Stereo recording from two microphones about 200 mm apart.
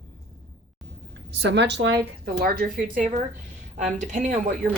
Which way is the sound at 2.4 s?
45° right (ahead or behind).